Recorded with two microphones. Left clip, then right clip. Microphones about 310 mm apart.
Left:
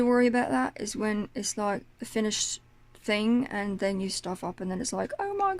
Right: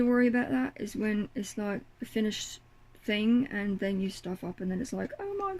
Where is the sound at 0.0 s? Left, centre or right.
Centre.